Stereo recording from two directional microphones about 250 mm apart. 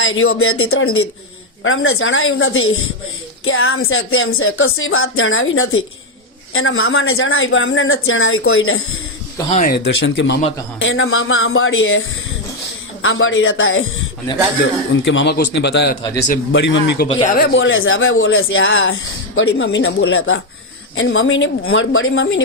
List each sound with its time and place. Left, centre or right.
0.0 s speech: left
9.5 s speech: left
14.9 s speech: left
17.1 s speech: left